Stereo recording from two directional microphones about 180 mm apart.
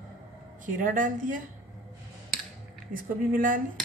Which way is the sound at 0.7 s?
45° right (ahead or behind).